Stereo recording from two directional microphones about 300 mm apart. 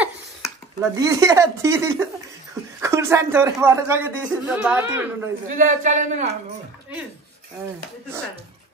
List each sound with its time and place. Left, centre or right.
0.9 s speech: centre
5.5 s speech: right